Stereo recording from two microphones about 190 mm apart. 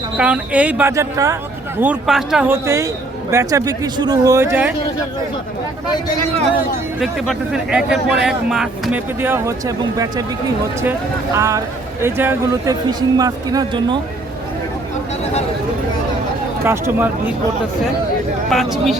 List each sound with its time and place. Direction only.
0.2 s a man's voice: 5° right (ahead or behind)
1.8 s speech: 5° right (ahead or behind)
2.5 s a man's voice: 15° right (ahead or behind)
7.0 s speech: centre (ahead or behind); by 10.2 s 20° right (ahead or behind)
11.3 s a man's voice: 15° right (ahead or behind)
16.6 s a man's voice: 10° right (ahead or behind)
18.5 s speech: centre (ahead or behind)